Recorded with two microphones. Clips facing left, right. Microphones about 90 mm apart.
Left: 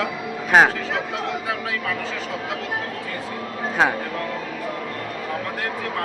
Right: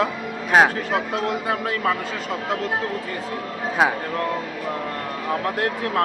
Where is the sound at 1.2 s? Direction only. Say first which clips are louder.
Right 3 dB; 45° right (ahead or behind).